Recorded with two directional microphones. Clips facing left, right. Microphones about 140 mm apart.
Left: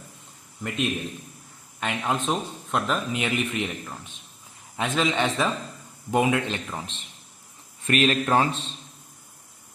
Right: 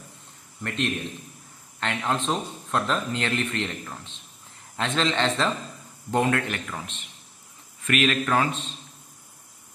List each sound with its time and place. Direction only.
0.6 s speech: 10° left (ahead or behind)
6.8 s a man's voice: 30° left (ahead or behind)